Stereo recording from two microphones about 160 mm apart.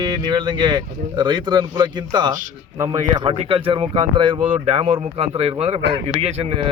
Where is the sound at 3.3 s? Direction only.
35° right (ahead or behind).